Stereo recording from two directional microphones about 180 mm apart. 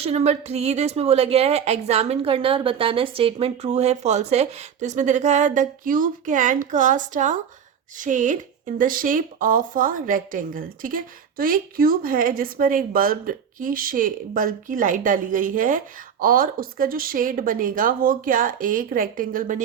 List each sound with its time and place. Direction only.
0.0 s a woman's voice: 35° right (ahead or behind)